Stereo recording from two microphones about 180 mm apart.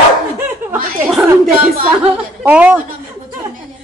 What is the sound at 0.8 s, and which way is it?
Chuckle, 50° right (ahead or behind).